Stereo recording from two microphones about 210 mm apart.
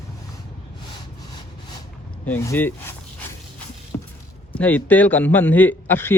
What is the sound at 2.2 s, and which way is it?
Speech, 10° left (ahead or behind).